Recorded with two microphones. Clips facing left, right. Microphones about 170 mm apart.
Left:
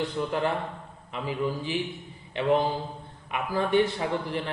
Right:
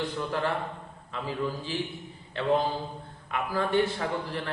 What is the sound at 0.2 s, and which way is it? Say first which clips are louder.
A man's voice: left 3 dB; 20° left (ahead or behind).